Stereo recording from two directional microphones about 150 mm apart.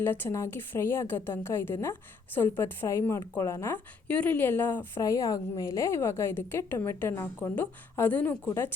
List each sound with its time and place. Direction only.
0.0 s a woman's voice: 15° left (ahead or behind)